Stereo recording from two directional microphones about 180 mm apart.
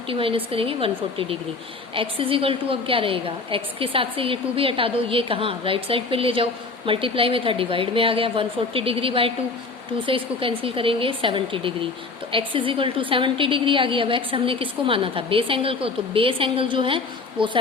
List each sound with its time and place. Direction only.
0.1 s a woman's voice: 30° right (ahead or behind)
2.0 s a woman's voice: 30° right (ahead or behind)